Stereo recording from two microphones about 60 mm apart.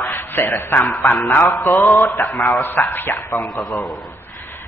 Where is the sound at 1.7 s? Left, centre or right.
Left.